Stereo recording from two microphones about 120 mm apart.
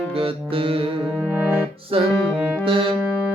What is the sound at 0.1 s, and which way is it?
Music, 50° right (ahead or behind).